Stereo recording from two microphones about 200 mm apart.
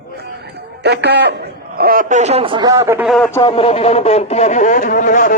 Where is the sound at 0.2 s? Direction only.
55° right (ahead or behind); by 3.1 s 10° right (ahead or behind).